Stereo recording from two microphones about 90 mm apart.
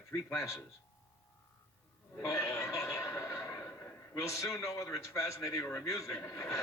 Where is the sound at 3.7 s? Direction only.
25° left (ahead or behind).